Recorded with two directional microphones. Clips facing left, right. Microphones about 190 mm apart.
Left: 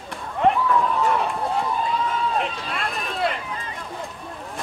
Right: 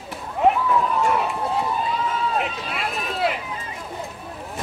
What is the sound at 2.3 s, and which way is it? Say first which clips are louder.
Run: even; 5° right (ahead or behind).